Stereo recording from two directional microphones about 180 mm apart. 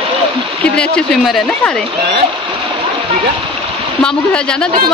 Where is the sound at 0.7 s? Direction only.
5° left (ahead or behind).